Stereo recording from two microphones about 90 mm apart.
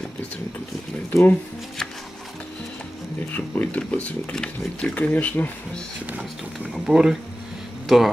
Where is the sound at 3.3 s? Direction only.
20° left (ahead or behind).